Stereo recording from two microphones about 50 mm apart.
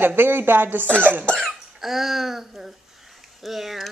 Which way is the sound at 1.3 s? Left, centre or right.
Centre.